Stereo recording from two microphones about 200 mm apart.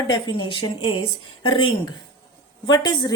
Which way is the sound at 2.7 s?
20° left (ahead or behind).